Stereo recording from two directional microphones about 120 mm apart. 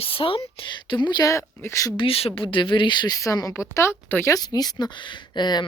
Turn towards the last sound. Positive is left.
turn(degrees=35)  # may be behind; listen again after turning